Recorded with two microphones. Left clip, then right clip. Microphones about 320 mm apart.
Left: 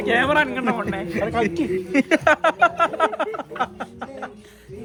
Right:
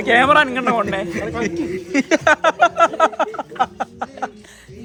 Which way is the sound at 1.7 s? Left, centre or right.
Centre.